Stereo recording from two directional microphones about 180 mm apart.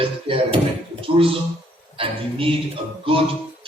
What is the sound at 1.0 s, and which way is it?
A man's voice, 30° right (ahead or behind).